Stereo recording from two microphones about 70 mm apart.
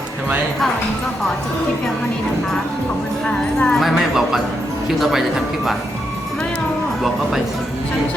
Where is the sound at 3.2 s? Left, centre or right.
Centre.